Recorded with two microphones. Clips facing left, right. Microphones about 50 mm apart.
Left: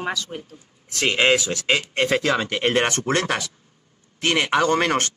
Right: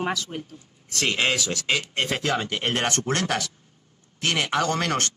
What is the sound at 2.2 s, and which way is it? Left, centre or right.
Speech, left.